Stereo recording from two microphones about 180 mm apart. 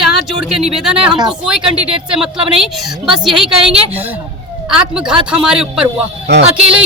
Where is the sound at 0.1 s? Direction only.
Centre (ahead or behind).